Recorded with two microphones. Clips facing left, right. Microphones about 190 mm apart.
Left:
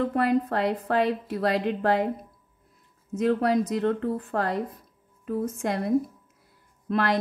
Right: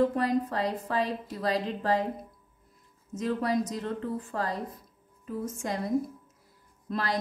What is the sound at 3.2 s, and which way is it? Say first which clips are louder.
A woman's voice: left 5 dB; 65° left (ahead or behind).